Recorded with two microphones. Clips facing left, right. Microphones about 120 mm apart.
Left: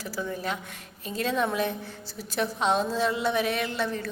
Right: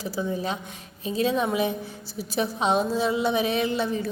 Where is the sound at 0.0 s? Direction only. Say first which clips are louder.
Right 4 dB; 15° right (ahead or behind).